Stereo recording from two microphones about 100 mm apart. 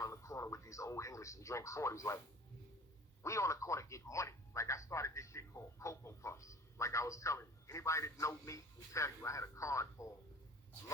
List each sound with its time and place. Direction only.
0.0 s speech: 30° left (ahead or behind)
3.2 s speech: 30° left (ahead or behind)